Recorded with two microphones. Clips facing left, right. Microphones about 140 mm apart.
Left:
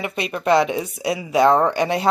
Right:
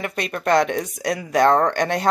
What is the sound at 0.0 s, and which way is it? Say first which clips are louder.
Speech: left 1 dB; 5° left (ahead or behind).